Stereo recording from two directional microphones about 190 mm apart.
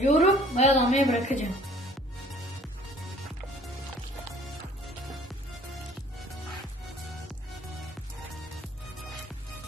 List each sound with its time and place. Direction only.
0.0 s a woman's voice: 40° left (ahead or behind)